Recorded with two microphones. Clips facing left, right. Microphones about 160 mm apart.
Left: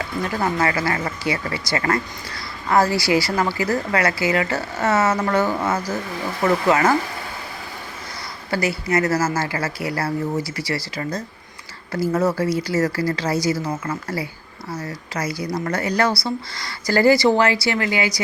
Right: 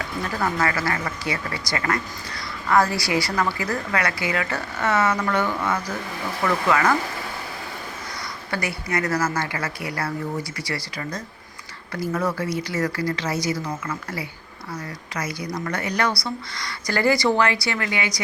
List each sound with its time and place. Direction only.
0.3 s speech: 25° left (ahead or behind)
8.4 s speech: 30° left (ahead or behind)